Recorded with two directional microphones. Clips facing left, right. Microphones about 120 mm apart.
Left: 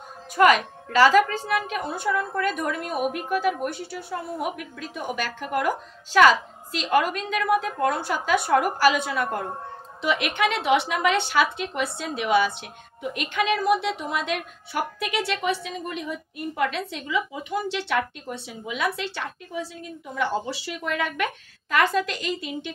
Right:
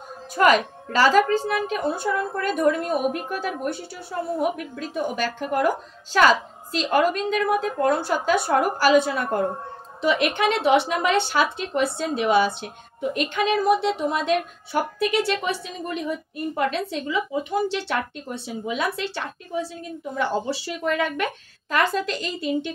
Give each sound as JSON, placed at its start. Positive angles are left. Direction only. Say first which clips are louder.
{"t": 0.4, "sound": "a woman's voice", "louder": "even", "side_deg": -35}